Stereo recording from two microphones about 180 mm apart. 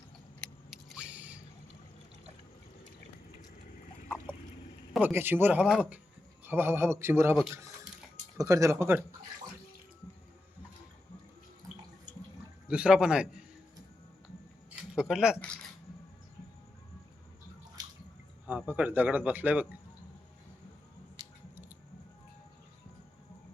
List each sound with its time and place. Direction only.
0.7 s biting: 5° right (ahead or behind)
5.0 s a man's voice: 10° right (ahead or behind)
8.4 s speech: 15° right (ahead or behind)
12.6 s a man's voice: 5° right (ahead or behind)
14.9 s a man's voice: 5° right (ahead or behind)
18.4 s speech: 10° right (ahead or behind)
21.2 s squish: 20° right (ahead or behind)